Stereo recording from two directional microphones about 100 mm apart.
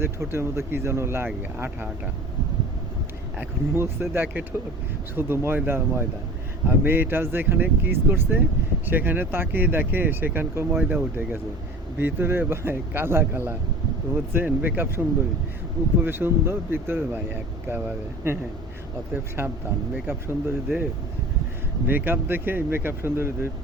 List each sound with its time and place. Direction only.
0.0 s speech: 25° right (ahead or behind)
3.3 s speech: 25° right (ahead or behind)
21.8 s speech: 20° right (ahead or behind)